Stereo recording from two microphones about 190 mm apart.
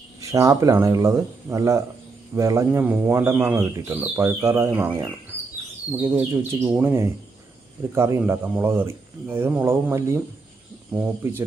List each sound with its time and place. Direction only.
0.2 s speech: 15° right (ahead or behind)
6.0 s speech: 10° right (ahead or behind)